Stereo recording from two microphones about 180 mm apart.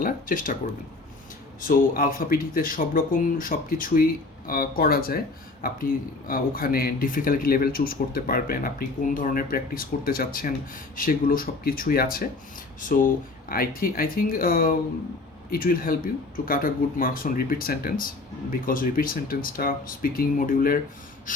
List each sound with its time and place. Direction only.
0.0 s speech: 50° left (ahead or behind)
1.6 s speech: 50° left (ahead or behind)
13.5 s speech: 55° left (ahead or behind)